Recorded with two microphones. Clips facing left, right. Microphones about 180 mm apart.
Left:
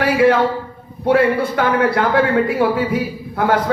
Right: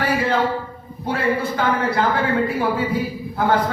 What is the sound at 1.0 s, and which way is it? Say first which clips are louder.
A man's voice: left 7 dB; 70° left (ahead or behind).